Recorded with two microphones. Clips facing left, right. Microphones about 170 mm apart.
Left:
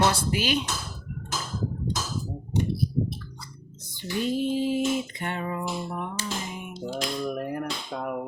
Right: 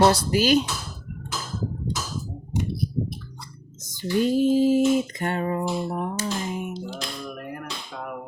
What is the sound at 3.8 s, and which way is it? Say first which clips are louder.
Female singing: right 6 dB; 40° right (ahead or behind).